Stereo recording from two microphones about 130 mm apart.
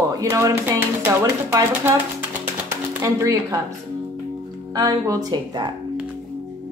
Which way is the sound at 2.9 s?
25° right (ahead or behind).